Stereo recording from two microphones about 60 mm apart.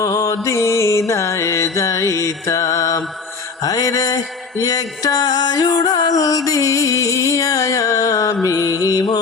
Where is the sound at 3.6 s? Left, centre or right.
Left.